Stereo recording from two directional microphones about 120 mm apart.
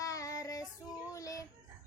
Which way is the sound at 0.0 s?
25° left (ahead or behind).